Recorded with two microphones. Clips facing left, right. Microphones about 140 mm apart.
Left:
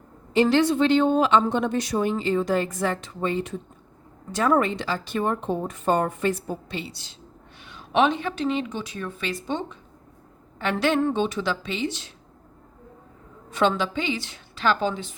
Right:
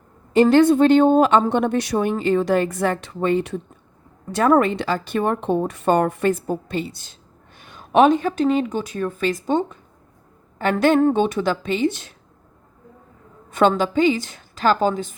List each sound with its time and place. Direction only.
0.3 s a woman's voice: 50° right (ahead or behind)
13.5 s a woman's voice: 45° right (ahead or behind)